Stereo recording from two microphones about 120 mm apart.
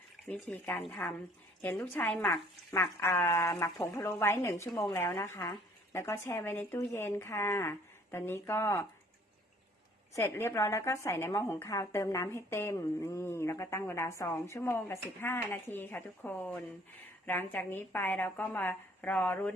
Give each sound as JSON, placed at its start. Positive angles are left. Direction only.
{"t": 0.3, "sound": "a woman's voice", "side_deg": 15}
{"t": 10.2, "sound": "a woman's voice", "side_deg": 20}